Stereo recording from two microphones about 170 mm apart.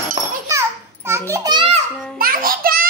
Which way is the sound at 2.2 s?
60° right (ahead or behind).